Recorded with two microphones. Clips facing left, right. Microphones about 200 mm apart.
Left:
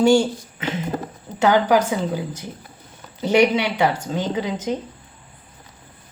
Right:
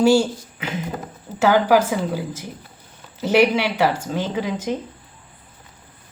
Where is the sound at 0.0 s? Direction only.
5° right (ahead or behind).